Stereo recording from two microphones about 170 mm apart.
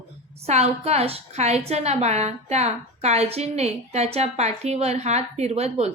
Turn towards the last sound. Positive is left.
turn(degrees=-40)  # may be behind; listen again after turning